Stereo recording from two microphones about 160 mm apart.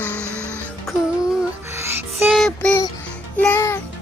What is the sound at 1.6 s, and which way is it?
Music, 15° right (ahead or behind).